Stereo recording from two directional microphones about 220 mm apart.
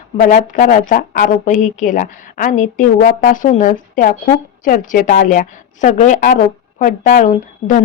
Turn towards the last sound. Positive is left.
turn(degrees=35)  # may be behind; listen again after turning